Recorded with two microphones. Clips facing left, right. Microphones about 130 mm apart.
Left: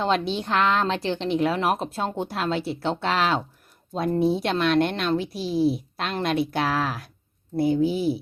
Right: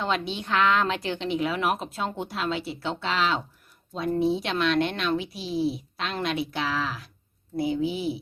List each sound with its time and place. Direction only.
0.3 s speech: 35° left (ahead or behind)